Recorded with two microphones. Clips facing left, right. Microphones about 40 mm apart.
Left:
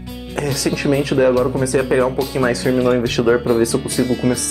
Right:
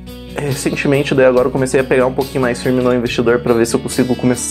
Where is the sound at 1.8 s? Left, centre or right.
Right.